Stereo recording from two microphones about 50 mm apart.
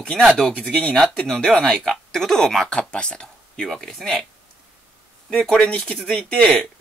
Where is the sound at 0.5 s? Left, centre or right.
Left.